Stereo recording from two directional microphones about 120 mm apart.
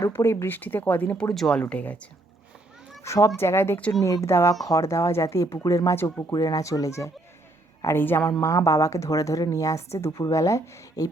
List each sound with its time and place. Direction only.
0.0 s speech: 20° left (ahead or behind)
1.3 s speech: 5° left (ahead or behind)
3.0 s a woman's voice: 25° left (ahead or behind)
4.0 s a woman's voice: 25° left (ahead or behind)